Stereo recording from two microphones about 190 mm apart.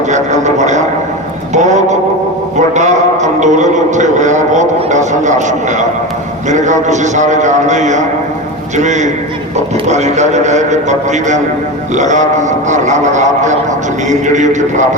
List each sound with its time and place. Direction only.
0.1 s speech: 40° right (ahead or behind)
1.5 s a sound: 40° right (ahead or behind)
6.5 s a man's voice: 40° right (ahead or behind)